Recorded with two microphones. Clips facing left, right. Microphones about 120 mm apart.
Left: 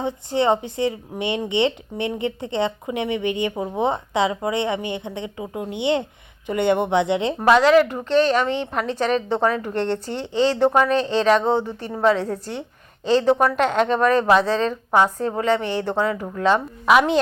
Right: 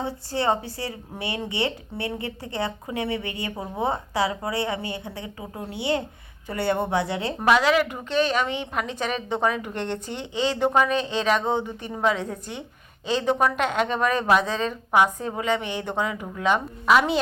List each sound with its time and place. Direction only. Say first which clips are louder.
0.0 s speech: left 5 dB; 20° left (ahead or behind)
7.3 s a woman's voice: left 5 dB; centre (ahead or behind)
16.8 s a woman's voice: left 3 dB; 5° left (ahead or behind)